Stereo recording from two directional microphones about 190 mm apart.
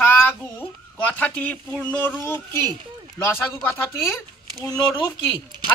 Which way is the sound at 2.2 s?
15° left (ahead or behind).